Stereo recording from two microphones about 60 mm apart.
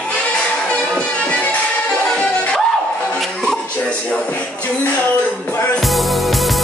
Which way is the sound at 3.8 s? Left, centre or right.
Centre.